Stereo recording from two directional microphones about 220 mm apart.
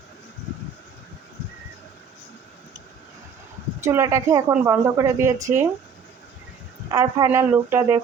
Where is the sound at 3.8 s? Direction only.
15° right (ahead or behind).